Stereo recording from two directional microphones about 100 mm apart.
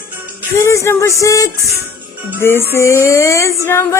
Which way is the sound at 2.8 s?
30° left (ahead or behind).